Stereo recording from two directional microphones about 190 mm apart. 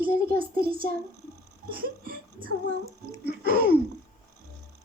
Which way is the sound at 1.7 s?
50° right (ahead or behind).